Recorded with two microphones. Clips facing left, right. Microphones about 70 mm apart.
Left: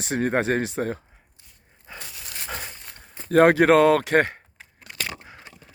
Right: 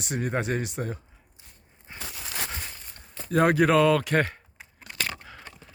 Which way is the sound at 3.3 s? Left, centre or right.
Left.